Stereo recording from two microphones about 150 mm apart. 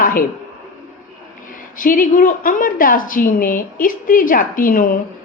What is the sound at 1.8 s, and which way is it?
A woman's voice, 65° left (ahead or behind).